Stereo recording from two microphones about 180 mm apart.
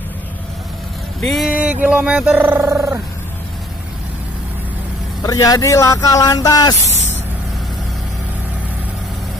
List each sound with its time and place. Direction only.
1.2 s speech: centre (ahead or behind)
5.2 s speech: 20° left (ahead or behind)